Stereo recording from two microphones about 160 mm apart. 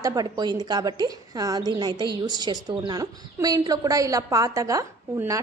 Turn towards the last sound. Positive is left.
turn(degrees=-20)  # may be behind; listen again after turning